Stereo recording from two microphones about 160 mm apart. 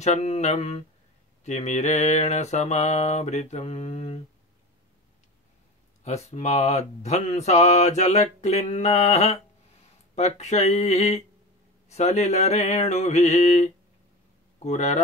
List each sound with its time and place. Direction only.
0.0 s speech: 45° left (ahead or behind)
6.0 s speech: 45° left (ahead or behind)